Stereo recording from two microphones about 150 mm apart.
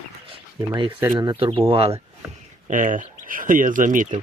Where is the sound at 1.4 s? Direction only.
35° right (ahead or behind).